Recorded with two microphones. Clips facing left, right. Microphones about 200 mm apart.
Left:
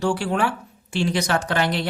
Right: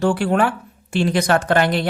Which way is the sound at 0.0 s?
55° right (ahead or behind).